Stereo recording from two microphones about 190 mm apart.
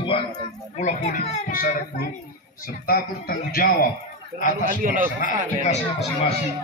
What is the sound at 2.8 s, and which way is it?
A man's voice, 50° left (ahead or behind).